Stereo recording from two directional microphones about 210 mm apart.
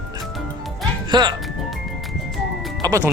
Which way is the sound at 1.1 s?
20° right (ahead or behind).